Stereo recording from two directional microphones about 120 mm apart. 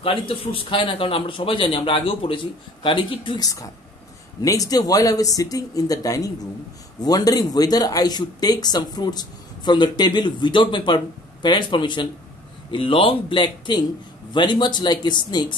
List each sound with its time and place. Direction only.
0.0 s speech: 50° left (ahead or behind)
3.4 s speech: 30° left (ahead or behind)